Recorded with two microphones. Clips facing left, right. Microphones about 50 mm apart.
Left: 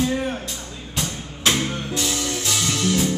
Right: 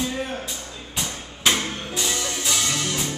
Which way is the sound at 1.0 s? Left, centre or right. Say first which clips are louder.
Even; centre.